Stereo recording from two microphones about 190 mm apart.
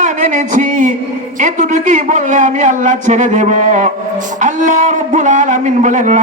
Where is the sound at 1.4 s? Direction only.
40° right (ahead or behind).